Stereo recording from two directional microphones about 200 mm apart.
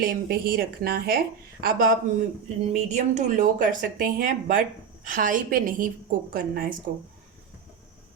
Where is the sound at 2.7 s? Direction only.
35° right (ahead or behind).